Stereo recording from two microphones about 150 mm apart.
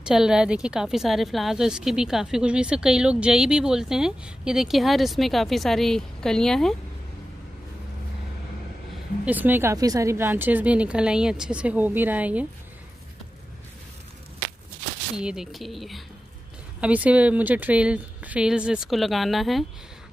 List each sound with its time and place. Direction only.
0.0 s a woman's voice: 5° right (ahead or behind)
9.2 s a woman's voice: 10° right (ahead or behind)
15.1 s a woman's voice: 5° right (ahead or behind)